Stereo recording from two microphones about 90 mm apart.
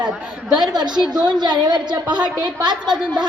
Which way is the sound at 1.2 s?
55° right (ahead or behind).